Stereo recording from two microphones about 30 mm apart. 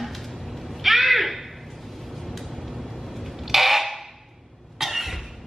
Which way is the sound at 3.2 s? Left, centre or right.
Centre.